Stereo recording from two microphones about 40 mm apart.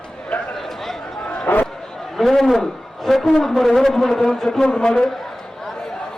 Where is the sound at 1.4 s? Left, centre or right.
Left.